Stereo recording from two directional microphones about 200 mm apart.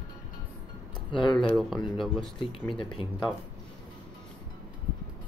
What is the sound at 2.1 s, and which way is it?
Speech, 25° left (ahead or behind).